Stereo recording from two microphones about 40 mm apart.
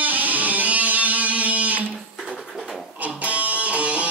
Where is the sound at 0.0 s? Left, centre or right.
Right.